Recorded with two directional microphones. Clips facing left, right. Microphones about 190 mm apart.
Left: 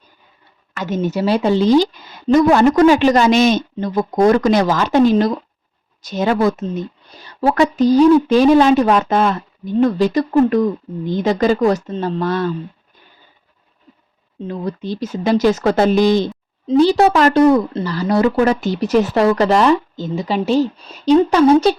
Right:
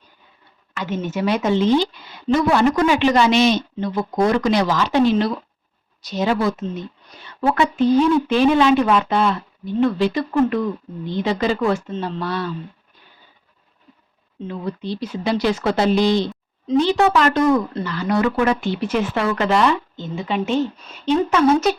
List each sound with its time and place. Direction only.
0.7 s speech: 40° left (ahead or behind)
14.4 s speech: 40° left (ahead or behind)
16.6 s speech: 35° left (ahead or behind)